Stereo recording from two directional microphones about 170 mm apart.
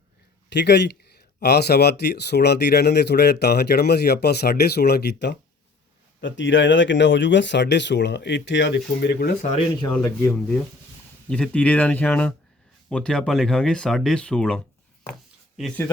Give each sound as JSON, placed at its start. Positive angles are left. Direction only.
{"t": 0.5, "sound": "speech", "side_deg": 85}
{"t": 9.4, "sound": "speech", "side_deg": 40}
{"t": 9.9, "sound": "speech", "side_deg": 10}